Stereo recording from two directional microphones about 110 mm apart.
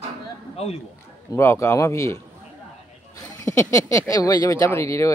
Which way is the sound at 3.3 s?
30° left (ahead or behind).